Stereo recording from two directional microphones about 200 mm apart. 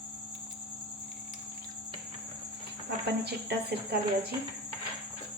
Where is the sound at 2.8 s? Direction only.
55° right (ahead or behind).